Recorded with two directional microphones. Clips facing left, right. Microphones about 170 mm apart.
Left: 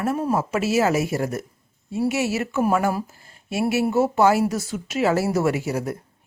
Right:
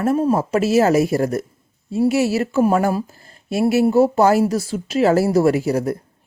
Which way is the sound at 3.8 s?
35° right (ahead or behind).